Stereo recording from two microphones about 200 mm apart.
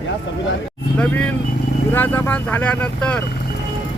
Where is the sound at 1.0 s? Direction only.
5° left (ahead or behind).